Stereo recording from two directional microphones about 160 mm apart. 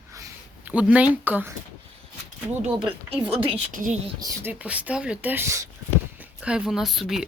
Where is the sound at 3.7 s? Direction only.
55° right (ahead or behind).